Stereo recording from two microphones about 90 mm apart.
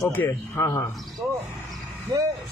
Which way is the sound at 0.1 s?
25° left (ahead or behind).